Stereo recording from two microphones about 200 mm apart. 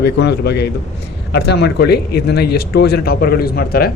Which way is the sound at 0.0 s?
55° left (ahead or behind).